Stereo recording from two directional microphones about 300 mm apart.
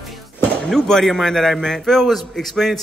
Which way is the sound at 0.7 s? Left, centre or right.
Centre.